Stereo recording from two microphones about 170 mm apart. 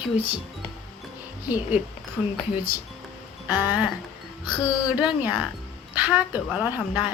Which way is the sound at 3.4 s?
10° right (ahead or behind).